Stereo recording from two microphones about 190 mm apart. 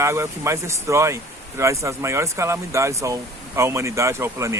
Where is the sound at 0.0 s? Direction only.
15° right (ahead or behind).